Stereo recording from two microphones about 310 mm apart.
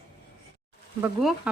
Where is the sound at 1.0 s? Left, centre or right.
Centre.